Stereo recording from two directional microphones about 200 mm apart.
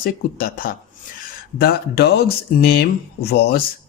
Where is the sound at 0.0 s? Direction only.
45° left (ahead or behind).